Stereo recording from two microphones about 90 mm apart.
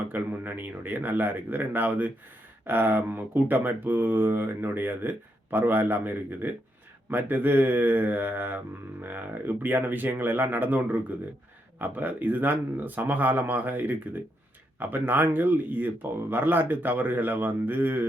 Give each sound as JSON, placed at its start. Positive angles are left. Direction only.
{"t": 0.1, "sound": "speech", "side_deg": -20}